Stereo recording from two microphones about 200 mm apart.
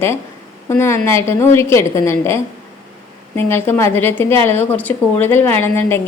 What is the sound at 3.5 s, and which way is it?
A woman's voice, 10° left (ahead or behind).